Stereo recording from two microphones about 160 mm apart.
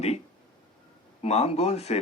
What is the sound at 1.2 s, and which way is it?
Speech, 40° left (ahead or behind).